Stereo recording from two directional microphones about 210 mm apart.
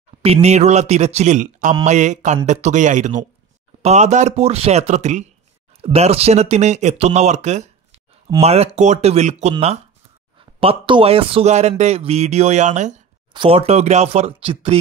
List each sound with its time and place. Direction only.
0.2 s a man's voice: 30° right (ahead or behind)